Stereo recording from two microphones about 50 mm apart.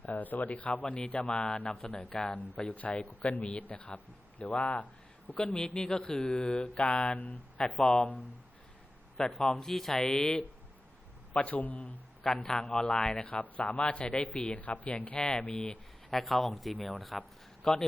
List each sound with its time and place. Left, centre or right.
0.0 s speech: left
2.0 s speech: centre
2.3 s speech: left
5.5 s speech: centre
7.7 s speech: centre
9.3 s speech: centre
11.3 s a man's voice: left
12.4 s speech: centre
13.2 s speech: left
14.5 s speech: left
16.0 s speech: centre